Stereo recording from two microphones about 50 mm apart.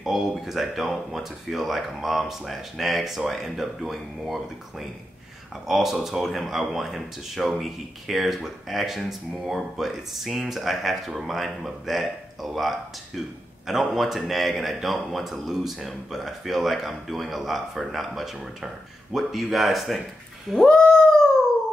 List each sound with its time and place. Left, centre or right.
0.0 s speech: centre
20.6 s dog: centre